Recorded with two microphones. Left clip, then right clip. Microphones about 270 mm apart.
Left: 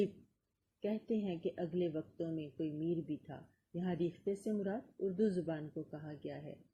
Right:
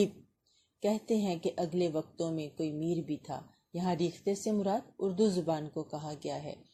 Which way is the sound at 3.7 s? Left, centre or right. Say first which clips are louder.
Right 6 dB; centre.